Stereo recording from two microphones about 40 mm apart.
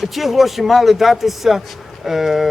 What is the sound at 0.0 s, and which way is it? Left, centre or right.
A man's voice, centre.